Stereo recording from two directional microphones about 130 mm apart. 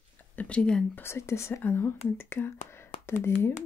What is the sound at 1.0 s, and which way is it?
Speech, 20° left (ahead or behind).